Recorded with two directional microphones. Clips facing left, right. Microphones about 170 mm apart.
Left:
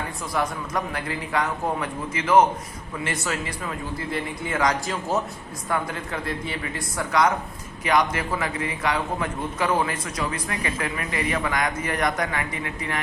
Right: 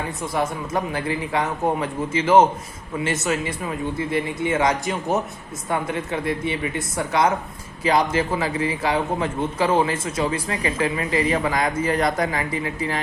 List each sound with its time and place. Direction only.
0.3 s a man's voice: 25° right (ahead or behind)